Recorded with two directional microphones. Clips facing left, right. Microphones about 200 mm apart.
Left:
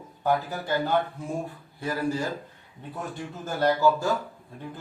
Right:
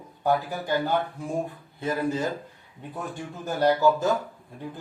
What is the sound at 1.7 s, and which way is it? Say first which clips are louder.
Speech: right 1 dB; 20° right (ahead or behind).